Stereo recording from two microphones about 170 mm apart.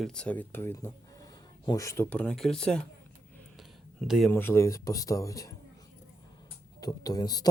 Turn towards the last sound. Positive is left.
turn(degrees=25)  # may be behind; listen again after turning